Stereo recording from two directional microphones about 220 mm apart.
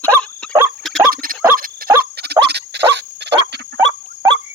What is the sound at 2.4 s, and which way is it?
Dog, 50° right (ahead or behind).